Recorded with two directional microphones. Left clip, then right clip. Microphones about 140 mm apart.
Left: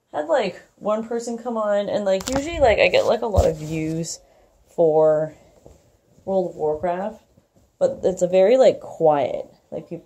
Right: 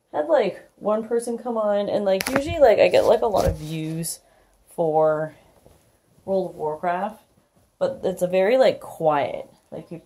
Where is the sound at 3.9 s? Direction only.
10° right (ahead or behind).